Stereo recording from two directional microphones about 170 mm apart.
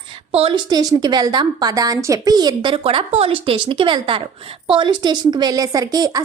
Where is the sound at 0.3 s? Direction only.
35° right (ahead or behind).